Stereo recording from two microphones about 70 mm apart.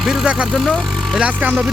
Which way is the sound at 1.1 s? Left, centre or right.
Right.